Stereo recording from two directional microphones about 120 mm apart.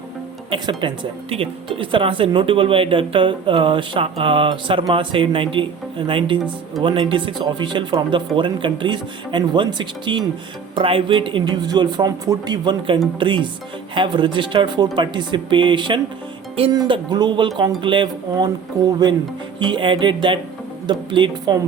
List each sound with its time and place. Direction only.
0.5 s speech: 40° right (ahead or behind)
19.5 s speech: 40° right (ahead or behind)